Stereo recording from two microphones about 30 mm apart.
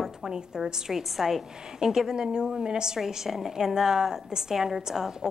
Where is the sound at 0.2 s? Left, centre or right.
Right.